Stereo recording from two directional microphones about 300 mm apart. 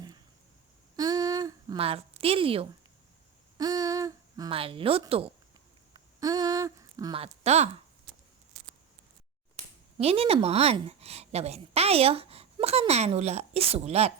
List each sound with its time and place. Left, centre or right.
0.9 s a sound: centre
3.6 s speech: centre
10.0 s a woman's voice: centre